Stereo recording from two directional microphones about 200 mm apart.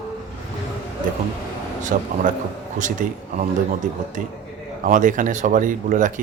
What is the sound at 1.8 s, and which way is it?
Speech, 40° right (ahead or behind).